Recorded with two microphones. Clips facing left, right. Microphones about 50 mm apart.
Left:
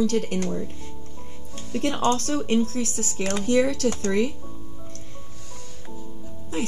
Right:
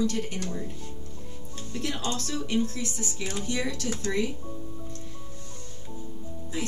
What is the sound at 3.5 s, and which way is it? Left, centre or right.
Speech, left.